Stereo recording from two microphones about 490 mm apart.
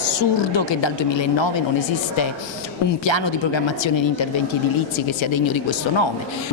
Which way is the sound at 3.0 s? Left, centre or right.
Left.